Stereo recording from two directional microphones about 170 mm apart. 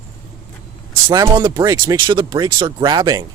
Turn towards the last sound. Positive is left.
turn(degrees=-20)  # may be behind; listen again after turning